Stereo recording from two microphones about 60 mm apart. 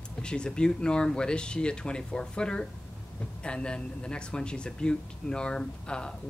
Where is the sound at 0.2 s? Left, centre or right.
Centre.